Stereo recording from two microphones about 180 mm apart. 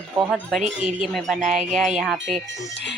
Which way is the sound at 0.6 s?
45° right (ahead or behind).